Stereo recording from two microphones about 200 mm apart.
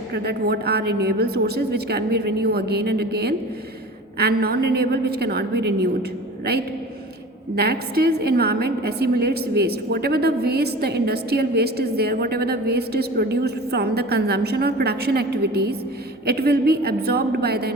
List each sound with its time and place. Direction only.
0.1 s a woman's voice: 55° right (ahead or behind)